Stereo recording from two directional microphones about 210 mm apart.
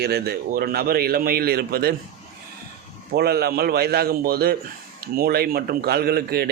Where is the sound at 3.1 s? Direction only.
50° right (ahead or behind).